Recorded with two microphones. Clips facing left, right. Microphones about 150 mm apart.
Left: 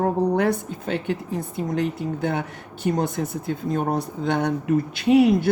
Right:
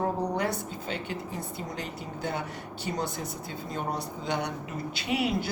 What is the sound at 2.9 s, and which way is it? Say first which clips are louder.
Speech: left 8 dB; 55° left (ahead or behind).